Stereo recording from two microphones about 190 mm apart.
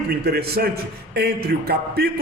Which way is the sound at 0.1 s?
55° right (ahead or behind).